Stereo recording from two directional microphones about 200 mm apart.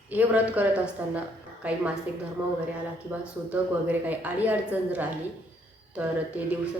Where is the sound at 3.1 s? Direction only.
10° right (ahead or behind).